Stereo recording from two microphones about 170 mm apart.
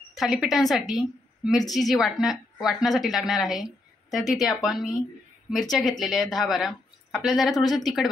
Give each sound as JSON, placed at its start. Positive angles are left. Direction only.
{"t": 0.1, "sound": "a woman's voice", "side_deg": 0}
{"t": 7.5, "sound": "speech", "side_deg": 25}
{"t": 7.8, "sound": "a woman's voice", "side_deg": 0}